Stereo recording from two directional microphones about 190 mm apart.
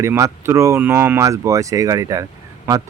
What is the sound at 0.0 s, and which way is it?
Speech, 15° right (ahead or behind).